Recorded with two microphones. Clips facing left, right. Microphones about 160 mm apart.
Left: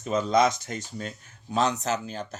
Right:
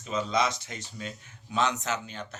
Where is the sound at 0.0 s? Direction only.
45° left (ahead or behind).